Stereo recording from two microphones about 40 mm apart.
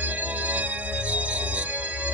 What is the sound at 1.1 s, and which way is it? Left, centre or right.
Music, right.